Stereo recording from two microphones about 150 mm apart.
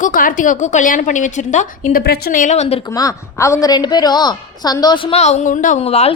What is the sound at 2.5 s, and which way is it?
Speech, 45° left (ahead or behind).